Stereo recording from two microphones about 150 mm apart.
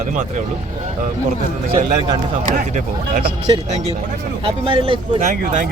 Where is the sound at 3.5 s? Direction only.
30° right (ahead or behind).